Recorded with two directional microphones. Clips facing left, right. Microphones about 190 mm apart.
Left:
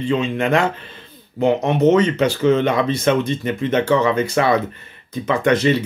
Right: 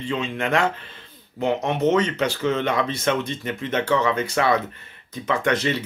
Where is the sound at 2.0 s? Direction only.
15° left (ahead or behind).